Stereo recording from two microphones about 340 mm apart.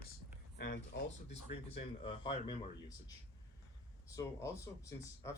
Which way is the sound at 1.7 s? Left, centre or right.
Centre.